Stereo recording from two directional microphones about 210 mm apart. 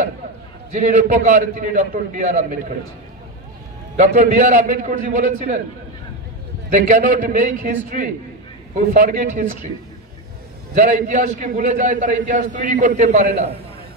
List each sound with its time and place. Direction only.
0.7 s a man's voice: 35° right (ahead or behind)
3.9 s a man's voice: 35° right (ahead or behind)
6.7 s a man's voice: 40° right (ahead or behind)
10.7 s a man's voice: 35° right (ahead or behind)